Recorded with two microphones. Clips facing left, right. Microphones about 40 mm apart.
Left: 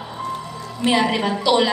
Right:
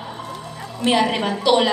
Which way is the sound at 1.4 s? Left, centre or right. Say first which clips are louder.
Right 1 dB; right.